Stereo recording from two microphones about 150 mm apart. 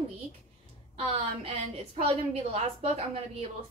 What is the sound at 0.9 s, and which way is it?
A woman's voice, 40° right (ahead or behind).